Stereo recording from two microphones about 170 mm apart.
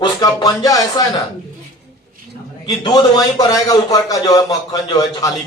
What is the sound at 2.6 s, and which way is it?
A man's voice, 25° left (ahead or behind).